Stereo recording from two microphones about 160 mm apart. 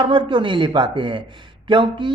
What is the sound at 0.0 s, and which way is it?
A man's voice, 30° right (ahead or behind).